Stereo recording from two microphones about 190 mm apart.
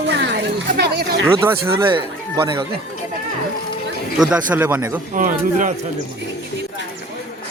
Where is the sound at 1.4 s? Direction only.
15° right (ahead or behind).